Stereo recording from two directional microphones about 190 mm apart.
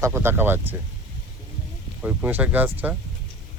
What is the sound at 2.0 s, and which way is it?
Speech, 10° right (ahead or behind).